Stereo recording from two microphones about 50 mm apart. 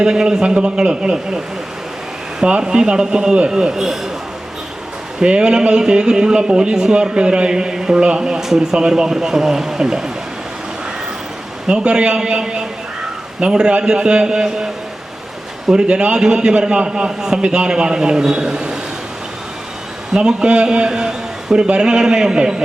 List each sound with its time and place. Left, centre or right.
0.0 s a man's voice: centre
2.4 s a man's voice: centre
5.2 s a man's voice: centre
11.7 s a man's voice: centre
15.9 s a man's voice: centre
20.1 s a man's voice: centre